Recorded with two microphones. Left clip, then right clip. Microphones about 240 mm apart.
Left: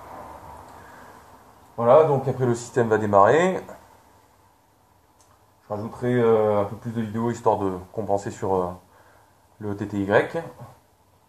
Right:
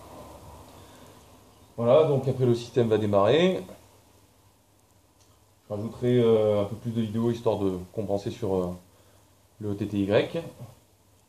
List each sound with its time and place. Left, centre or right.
0.0 s a sound: left
1.9 s speech: left
5.7 s speech: left